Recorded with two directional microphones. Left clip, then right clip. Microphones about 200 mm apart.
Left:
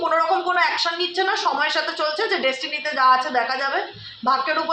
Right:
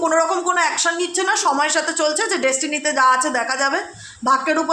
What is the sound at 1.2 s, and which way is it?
A woman's voice, 60° right (ahead or behind).